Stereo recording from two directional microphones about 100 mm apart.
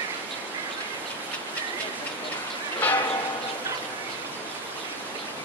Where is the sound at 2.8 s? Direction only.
15° left (ahead or behind).